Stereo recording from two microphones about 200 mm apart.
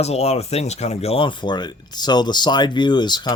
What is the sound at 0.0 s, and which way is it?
Speech, 30° left (ahead or behind).